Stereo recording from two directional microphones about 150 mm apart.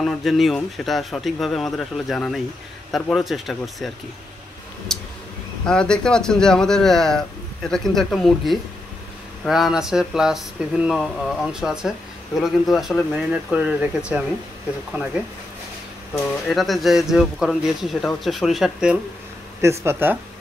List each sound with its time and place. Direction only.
0.0 s speech: centre (ahead or behind)
4.9 s vehicle: centre (ahead or behind)
5.7 s speech: 5° left (ahead or behind)
16.4 s speech: centre (ahead or behind)
19.6 s speech: 20° right (ahead or behind)